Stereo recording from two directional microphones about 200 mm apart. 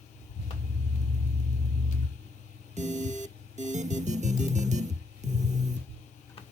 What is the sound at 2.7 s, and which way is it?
Music, 35° right (ahead or behind).